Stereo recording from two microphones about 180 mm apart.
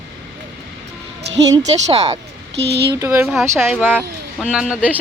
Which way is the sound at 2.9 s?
15° right (ahead or behind).